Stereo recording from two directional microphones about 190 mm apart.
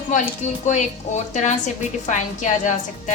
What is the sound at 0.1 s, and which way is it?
A woman's voice, 40° left (ahead or behind).